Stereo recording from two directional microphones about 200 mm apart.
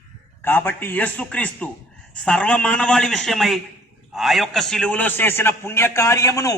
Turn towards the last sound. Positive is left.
turn(degrees=15)  # may be behind; listen again after turning